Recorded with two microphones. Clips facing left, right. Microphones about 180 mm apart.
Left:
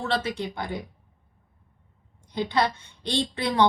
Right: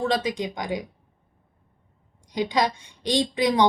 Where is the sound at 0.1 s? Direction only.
15° right (ahead or behind).